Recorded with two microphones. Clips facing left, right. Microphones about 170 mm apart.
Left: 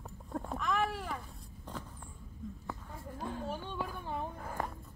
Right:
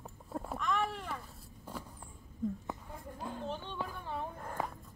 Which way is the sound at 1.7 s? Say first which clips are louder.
Even; 10° right (ahead or behind).